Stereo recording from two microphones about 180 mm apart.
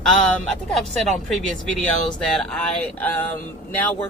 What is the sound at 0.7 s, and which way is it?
Speech, centre (ahead or behind).